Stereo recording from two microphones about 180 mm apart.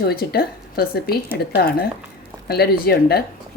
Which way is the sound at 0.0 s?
60° left (ahead or behind).